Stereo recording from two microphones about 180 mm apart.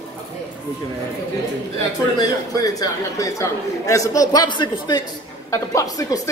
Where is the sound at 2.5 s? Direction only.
20° left (ahead or behind).